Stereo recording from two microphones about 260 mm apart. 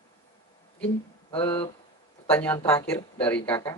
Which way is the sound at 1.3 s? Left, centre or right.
Left.